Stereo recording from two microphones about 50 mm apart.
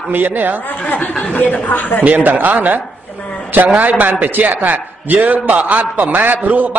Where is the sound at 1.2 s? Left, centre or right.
Left.